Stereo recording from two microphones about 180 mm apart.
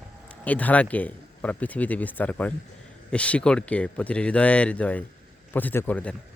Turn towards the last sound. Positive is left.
turn(degrees=10)  # may be behind; listen again after turning